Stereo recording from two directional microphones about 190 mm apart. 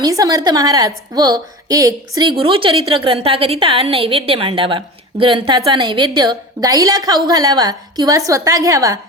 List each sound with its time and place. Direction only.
0.0 s a woman's voice: 20° right (ahead or behind)